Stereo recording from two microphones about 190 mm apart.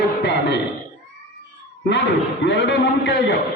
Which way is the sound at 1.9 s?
65° left (ahead or behind).